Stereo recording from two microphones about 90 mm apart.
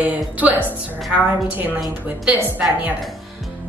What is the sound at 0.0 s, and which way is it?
Speech, 15° right (ahead or behind).